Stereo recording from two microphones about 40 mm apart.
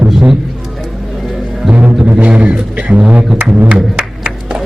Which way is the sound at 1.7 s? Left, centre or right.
Right.